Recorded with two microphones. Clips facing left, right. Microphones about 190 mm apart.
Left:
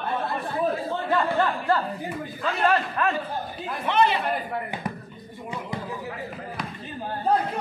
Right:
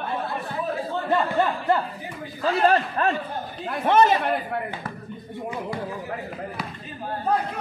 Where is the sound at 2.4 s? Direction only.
35° right (ahead or behind).